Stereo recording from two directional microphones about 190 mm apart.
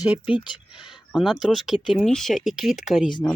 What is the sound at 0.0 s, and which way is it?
Speech, 5° right (ahead or behind).